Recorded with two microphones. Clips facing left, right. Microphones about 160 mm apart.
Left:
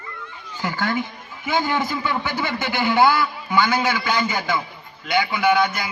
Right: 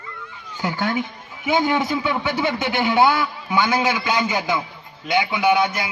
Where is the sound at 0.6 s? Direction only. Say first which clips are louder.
Right 1 dB; 15° right (ahead or behind).